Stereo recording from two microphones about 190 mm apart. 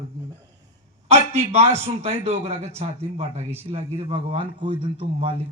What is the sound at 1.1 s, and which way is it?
A man's voice, 35° right (ahead or behind).